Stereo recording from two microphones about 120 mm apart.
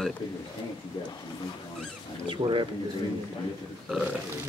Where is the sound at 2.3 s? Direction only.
45° right (ahead or behind).